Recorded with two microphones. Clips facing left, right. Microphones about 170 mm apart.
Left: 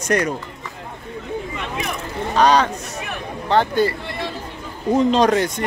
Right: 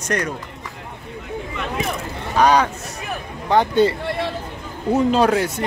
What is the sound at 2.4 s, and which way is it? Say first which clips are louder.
Speech: even; 10° right (ahead or behind).